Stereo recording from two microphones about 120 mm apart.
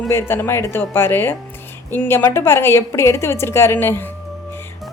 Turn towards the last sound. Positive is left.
turn(degrees=20)  # may be behind; listen again after turning